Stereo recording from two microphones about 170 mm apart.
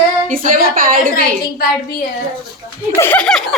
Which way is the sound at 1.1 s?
60° left (ahead or behind).